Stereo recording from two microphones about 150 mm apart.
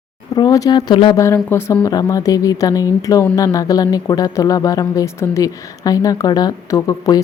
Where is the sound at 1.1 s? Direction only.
20° left (ahead or behind).